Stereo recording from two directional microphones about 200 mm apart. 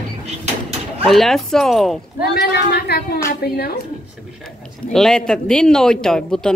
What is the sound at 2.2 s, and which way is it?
A woman's voice, 55° left (ahead or behind).